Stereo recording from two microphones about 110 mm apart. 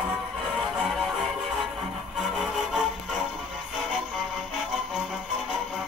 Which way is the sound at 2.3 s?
5° right (ahead or behind).